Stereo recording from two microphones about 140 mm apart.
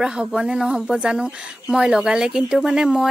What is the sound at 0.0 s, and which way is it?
Speech, 5° right (ahead or behind).